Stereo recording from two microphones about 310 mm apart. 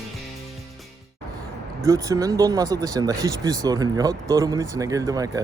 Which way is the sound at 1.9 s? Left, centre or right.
Centre.